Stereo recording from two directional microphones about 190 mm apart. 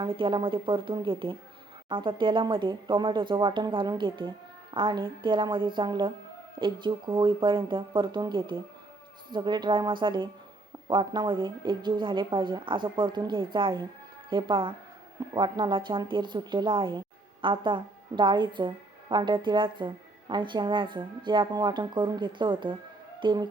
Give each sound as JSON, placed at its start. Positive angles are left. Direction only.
{"t": 0.0, "sound": "speech", "side_deg": -25}